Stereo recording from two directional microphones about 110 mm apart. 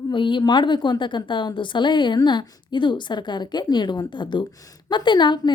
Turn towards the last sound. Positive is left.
turn(degrees=45)  # may be behind; listen again after turning